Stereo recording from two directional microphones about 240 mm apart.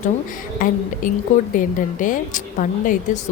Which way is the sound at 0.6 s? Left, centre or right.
Left.